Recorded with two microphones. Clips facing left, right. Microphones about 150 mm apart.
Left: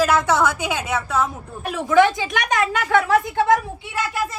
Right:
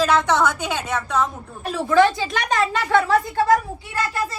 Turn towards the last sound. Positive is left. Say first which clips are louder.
# even
turn(degrees=0)  # may be behind; listen again after turning